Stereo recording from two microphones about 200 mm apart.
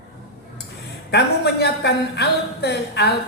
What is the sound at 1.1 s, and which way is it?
A woman's voice, 55° left (ahead or behind).